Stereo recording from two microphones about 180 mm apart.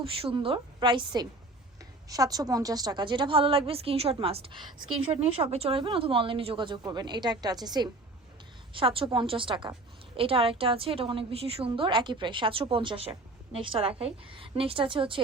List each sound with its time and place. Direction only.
0.0 s a woman's voice: 30° right (ahead or behind)